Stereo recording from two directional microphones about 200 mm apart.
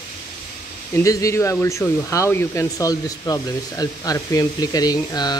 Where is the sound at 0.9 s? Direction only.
15° left (ahead or behind).